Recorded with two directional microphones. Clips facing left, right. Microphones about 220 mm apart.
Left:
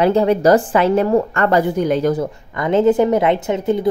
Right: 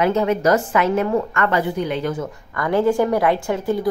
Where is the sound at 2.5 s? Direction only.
20° left (ahead or behind).